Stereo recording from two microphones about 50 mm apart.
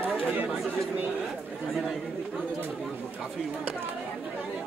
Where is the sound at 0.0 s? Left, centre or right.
Right.